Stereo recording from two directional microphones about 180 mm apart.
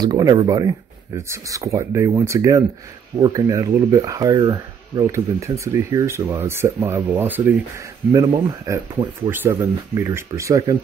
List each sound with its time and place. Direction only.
0.0 s speech: 20° right (ahead or behind)